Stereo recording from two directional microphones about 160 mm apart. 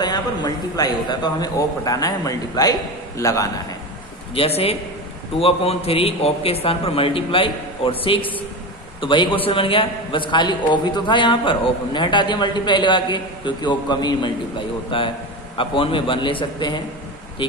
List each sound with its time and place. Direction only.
0.0 s a man's voice: 25° left (ahead or behind)
4.4 s a man's voice: 40° left (ahead or behind)